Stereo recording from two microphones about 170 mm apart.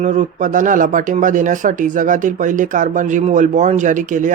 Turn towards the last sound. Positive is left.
turn(degrees=-50)  # may be behind; listen again after turning